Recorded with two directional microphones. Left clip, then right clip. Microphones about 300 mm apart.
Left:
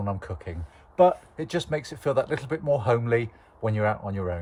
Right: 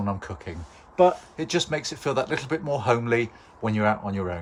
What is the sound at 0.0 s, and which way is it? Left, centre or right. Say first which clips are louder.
Speech: right 1 dB; centre.